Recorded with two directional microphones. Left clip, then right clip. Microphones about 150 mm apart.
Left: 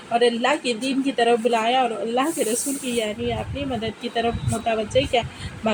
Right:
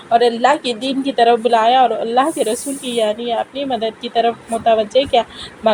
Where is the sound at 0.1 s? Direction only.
25° right (ahead or behind).